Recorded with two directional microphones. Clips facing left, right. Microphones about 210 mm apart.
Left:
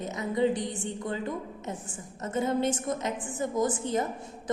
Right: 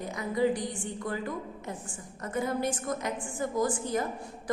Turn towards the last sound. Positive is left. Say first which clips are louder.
# left 1 dB
turn(degrees=20)  # may be behind; listen again after turning